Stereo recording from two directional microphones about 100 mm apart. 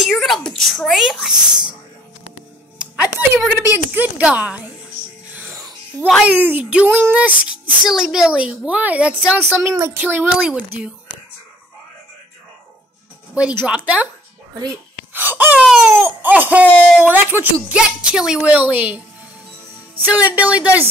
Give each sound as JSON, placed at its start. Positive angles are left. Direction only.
{"t": 0.0, "sound": "speech", "side_deg": 0}
{"t": 2.8, "sound": "a sound", "side_deg": -5}
{"t": 3.6, "sound": "a woman's voice", "side_deg": -20}
{"t": 5.3, "sound": "music", "side_deg": -20}
{"t": 6.2, "sound": "a woman's voice", "side_deg": -15}
{"t": 13.3, "sound": "a woman's voice", "side_deg": -10}
{"t": 15.1, "sound": "speech", "side_deg": -20}
{"t": 15.6, "sound": "baby cry", "side_deg": 0}
{"t": 16.0, "sound": "a woman's voice", "side_deg": -20}
{"t": 20.0, "sound": "a woman's voice", "side_deg": -15}